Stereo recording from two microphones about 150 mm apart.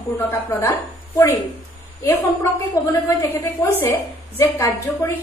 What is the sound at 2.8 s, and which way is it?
A woman's voice, 20° left (ahead or behind).